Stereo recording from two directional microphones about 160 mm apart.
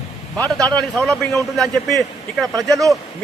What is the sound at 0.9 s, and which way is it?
A man's voice, centre (ahead or behind).